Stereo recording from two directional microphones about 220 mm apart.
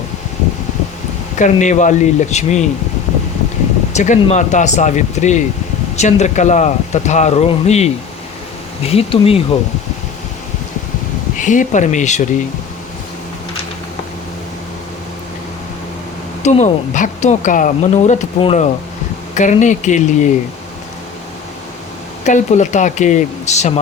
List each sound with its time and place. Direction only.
1.4 s speech: 35° left (ahead or behind)
3.9 s speech: 35° left (ahead or behind)
8.9 s speech: 25° left (ahead or behind)
11.3 s speech: 35° left (ahead or behind)
16.4 s speech: 30° left (ahead or behind)
22.2 s speech: 35° left (ahead or behind)